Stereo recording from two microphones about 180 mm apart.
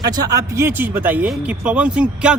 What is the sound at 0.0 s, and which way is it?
Speech, 20° right (ahead or behind).